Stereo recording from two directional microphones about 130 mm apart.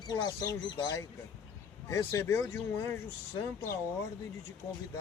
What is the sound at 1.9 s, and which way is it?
Speech, 20° left (ahead or behind).